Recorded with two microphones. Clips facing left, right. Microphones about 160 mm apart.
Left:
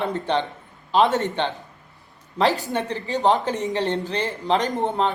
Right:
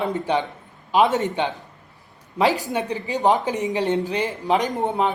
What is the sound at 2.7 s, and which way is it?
Speech, 15° right (ahead or behind).